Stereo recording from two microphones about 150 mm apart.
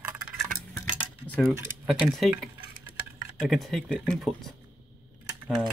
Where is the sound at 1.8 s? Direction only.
5° right (ahead or behind).